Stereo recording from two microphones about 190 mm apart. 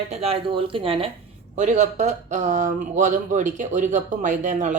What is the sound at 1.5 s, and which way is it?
Speech, 40° right (ahead or behind).